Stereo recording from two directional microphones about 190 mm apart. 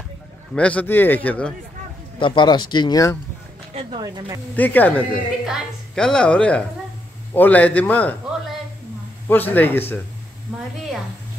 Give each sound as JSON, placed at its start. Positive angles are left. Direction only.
{"t": 0.6, "sound": "speech", "side_deg": 5}
{"t": 2.1, "sound": "speech", "side_deg": 25}
{"t": 4.0, "sound": "speech", "side_deg": -20}
{"t": 4.6, "sound": "a woman's voice", "side_deg": 10}